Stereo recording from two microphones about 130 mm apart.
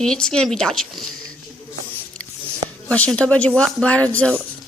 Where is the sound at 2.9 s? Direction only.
10° left (ahead or behind).